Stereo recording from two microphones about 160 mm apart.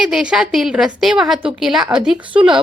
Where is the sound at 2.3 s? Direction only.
30° right (ahead or behind).